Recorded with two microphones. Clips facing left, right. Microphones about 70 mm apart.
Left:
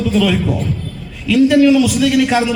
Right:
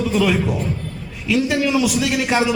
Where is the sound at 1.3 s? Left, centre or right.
Centre.